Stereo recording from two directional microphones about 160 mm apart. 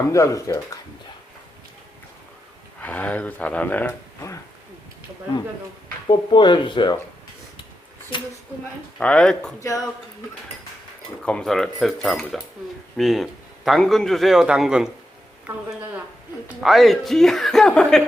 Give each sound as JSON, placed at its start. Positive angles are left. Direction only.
{"t": 0.1, "sound": "speech", "side_deg": 20}
{"t": 2.8, "sound": "speech", "side_deg": 10}
{"t": 6.1, "sound": "speech", "side_deg": 30}
{"t": 9.0, "sound": "a woman's voice", "side_deg": 5}
{"t": 11.2, "sound": "a woman's voice", "side_deg": 5}
{"t": 16.6, "sound": "a woman's voice", "side_deg": 0}